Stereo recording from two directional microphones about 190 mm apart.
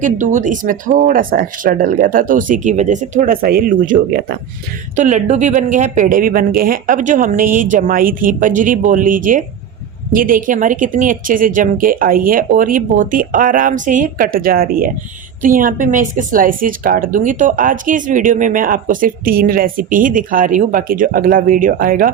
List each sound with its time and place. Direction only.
0.0 s speech: 40° right (ahead or behind)